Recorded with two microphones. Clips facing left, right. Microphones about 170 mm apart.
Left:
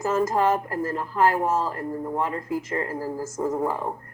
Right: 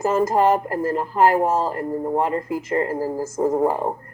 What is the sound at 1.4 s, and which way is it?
Speech, 30° right (ahead or behind).